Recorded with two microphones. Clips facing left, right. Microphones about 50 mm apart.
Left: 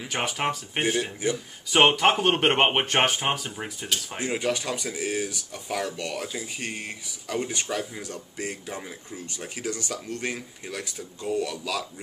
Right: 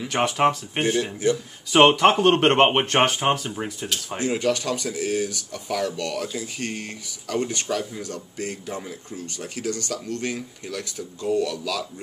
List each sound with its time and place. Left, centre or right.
0.0 s speech: centre
4.2 s speech: centre